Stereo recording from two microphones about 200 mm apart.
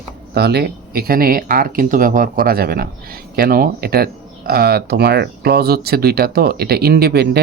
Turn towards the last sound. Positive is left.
turn(degrees=-55)  # may be behind; listen again after turning